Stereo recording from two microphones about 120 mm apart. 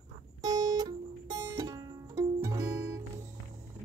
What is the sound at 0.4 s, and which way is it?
Music, 30° right (ahead or behind).